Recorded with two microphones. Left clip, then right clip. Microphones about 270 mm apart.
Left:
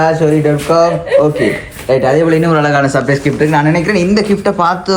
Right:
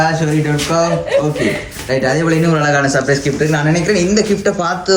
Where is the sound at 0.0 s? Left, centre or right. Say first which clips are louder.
Left 5 dB; centre.